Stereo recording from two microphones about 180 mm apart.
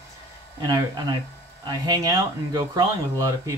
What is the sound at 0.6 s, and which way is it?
Speech, 25° right (ahead or behind).